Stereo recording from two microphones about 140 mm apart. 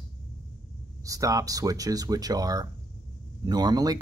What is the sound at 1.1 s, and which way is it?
Speech, 25° right (ahead or behind).